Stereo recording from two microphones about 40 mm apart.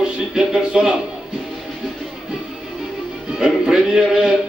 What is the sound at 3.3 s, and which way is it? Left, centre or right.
Music, centre.